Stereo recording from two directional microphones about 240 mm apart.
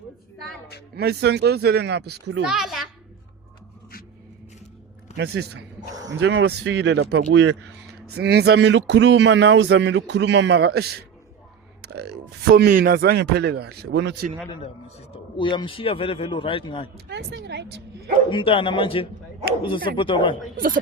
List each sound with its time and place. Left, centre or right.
0.9 s speech: right
2.4 s a child's voice: centre
5.1 s speech: right
5.9 s speech: centre
6.1 s speech: right
11.8 s a sound: right
12.5 s speech: right
15.1 s a man's voice: centre
17.1 s speech: right
18.3 s a man's voice: left